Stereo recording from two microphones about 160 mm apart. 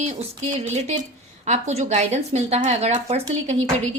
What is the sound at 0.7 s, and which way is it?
A woman's voice, 40° right (ahead or behind).